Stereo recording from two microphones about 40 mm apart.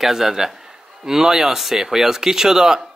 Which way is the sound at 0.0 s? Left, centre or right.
Centre.